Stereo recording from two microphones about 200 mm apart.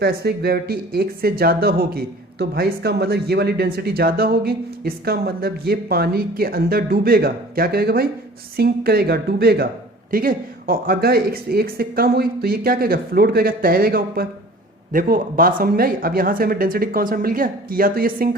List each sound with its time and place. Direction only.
0.0 s speech: 55° right (ahead or behind)